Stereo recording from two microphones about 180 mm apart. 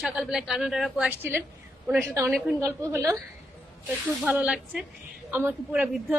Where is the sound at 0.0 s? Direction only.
5° right (ahead or behind).